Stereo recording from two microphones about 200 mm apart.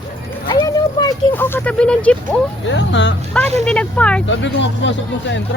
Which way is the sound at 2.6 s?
65° left (ahead or behind).